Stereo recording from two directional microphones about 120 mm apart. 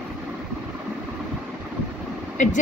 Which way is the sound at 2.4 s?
90° left.